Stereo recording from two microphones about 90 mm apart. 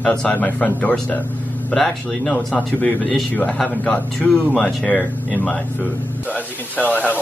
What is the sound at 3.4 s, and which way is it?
Speech, 10° left (ahead or behind).